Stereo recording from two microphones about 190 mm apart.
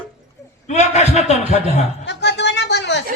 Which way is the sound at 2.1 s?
65° left (ahead or behind).